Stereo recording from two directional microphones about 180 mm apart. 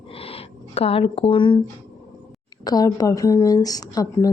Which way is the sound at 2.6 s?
20° left (ahead or behind).